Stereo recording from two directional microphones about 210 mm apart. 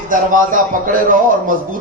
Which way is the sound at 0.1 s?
40° right (ahead or behind).